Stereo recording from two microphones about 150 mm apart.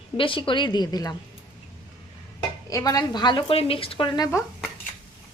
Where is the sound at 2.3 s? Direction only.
25° left (ahead or behind).